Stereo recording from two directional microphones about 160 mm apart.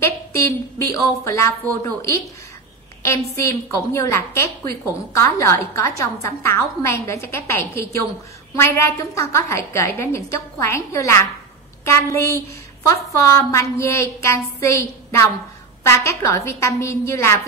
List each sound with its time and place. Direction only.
0.0 s a woman's voice: 15° left (ahead or behind)
3.3 s a woman's voice: 20° left (ahead or behind)